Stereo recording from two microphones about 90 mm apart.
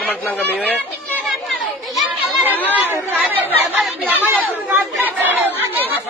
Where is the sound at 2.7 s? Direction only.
20° right (ahead or behind).